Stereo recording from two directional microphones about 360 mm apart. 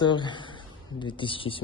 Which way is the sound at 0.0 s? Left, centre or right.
Centre.